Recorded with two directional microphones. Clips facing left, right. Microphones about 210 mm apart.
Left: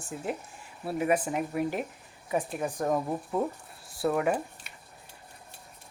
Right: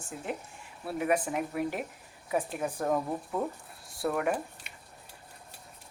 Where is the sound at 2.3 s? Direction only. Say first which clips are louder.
Left 1 dB; 15° left (ahead or behind).